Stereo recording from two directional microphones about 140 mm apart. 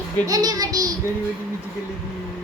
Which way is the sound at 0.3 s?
25° right (ahead or behind).